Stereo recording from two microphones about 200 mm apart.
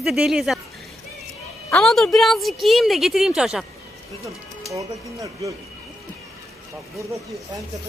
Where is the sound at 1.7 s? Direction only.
Centre (ahead or behind).